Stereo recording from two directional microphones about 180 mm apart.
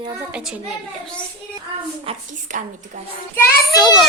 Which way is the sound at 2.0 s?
45° right (ahead or behind).